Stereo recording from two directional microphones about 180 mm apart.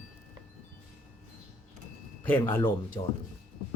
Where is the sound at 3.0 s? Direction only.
30° left (ahead or behind).